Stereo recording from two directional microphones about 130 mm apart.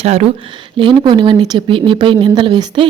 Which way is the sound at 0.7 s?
40° right (ahead or behind).